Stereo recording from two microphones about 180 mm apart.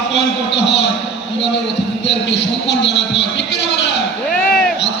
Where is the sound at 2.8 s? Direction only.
75° left (ahead or behind).